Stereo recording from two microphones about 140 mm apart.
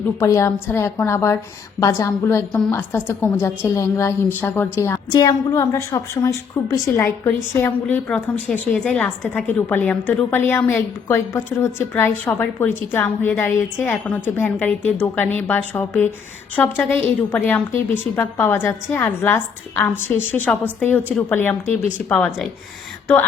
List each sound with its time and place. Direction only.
0.2 s a woman's voice: 20° left (ahead or behind)